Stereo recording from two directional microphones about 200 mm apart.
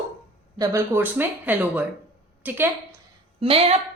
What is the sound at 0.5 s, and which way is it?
A woman's voice, 15° right (ahead or behind).